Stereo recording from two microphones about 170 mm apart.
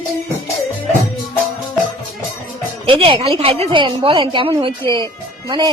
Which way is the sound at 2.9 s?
30° right (ahead or behind).